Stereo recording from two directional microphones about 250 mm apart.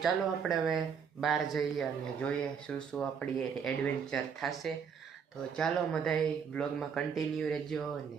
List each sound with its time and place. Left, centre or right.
0.0 s speech: centre